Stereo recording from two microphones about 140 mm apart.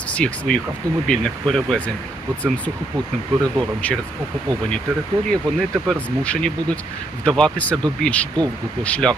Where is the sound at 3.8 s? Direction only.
10° left (ahead or behind).